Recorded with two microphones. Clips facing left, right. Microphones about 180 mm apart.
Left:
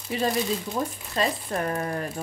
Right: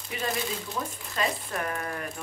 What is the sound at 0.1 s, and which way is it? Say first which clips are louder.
Speech: left 6 dB; 35° left (ahead or behind).